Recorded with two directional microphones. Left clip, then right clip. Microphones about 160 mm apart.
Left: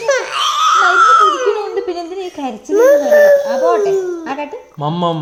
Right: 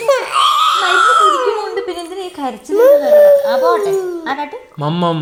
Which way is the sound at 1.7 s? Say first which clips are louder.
Left 1 dB; 25° left (ahead or behind).